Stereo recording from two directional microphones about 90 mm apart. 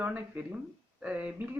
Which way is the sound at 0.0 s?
20° right (ahead or behind).